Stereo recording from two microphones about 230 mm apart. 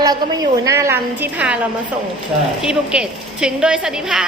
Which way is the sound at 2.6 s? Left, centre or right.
Centre.